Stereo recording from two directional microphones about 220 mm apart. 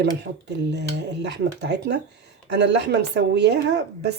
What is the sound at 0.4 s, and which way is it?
Speech, 50° right (ahead or behind).